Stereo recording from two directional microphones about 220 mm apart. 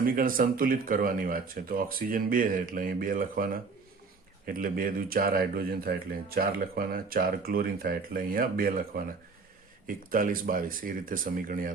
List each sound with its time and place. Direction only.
0.0 s speech: 40° right (ahead or behind)